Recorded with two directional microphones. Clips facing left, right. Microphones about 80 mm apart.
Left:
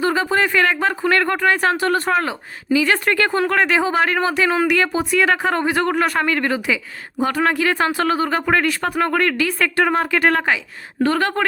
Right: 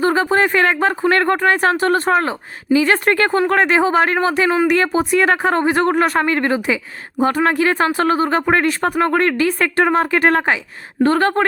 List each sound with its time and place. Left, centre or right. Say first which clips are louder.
0.0 s speech: right 3 dB; right